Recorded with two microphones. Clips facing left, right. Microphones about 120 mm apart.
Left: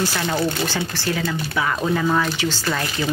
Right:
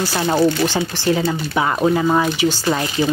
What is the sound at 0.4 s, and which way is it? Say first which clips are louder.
Speech: right 6 dB; 20° right (ahead or behind).